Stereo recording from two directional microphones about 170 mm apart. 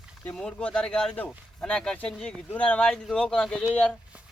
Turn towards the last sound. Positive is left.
turn(degrees=5)  # may be behind; listen again after turning